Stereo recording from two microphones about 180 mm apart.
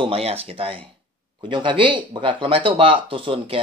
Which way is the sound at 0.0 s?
35° right (ahead or behind).